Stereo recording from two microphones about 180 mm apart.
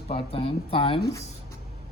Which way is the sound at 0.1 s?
30° left (ahead or behind).